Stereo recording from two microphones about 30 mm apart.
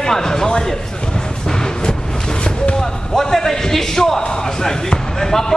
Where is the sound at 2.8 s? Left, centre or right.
Centre.